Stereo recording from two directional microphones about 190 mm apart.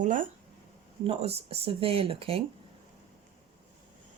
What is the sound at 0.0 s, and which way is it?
Speech, 45° right (ahead or behind).